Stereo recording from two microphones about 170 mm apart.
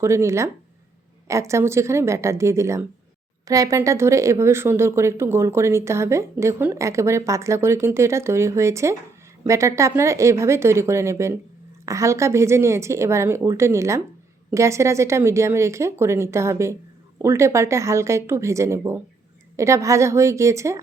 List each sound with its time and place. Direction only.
0.0 s speech: 15° right (ahead or behind)